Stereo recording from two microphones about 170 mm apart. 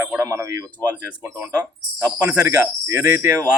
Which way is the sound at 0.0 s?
15° right (ahead or behind).